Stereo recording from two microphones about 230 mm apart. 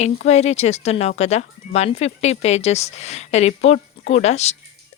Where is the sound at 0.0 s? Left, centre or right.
Left.